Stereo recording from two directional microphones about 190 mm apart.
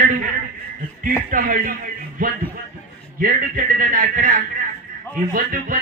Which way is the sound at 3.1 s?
45° right (ahead or behind).